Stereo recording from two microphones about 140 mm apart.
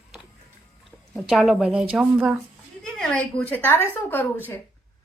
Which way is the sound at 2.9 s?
5° left (ahead or behind).